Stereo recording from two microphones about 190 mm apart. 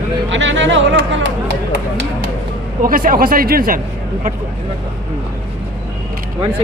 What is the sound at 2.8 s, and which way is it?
Speech, 45° right (ahead or behind).